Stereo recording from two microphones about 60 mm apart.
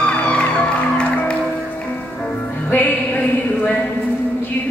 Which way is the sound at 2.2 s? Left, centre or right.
Left.